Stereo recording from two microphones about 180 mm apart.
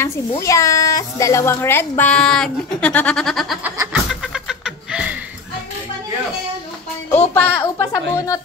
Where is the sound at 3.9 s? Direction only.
5° right (ahead or behind).